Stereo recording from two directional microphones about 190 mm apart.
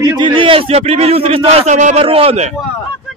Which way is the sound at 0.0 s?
25° right (ahead or behind).